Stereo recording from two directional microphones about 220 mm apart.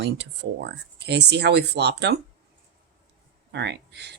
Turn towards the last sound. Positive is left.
turn(degrees=-50)  # may be behind; listen again after turning